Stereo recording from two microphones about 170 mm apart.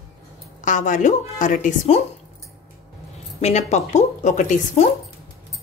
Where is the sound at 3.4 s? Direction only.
40° left (ahead or behind).